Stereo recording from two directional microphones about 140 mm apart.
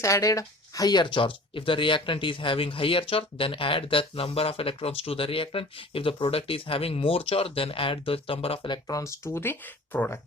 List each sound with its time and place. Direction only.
0.0 s speech: 20° left (ahead or behind)